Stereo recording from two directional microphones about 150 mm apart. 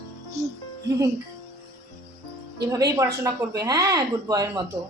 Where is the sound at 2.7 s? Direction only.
20° right (ahead or behind).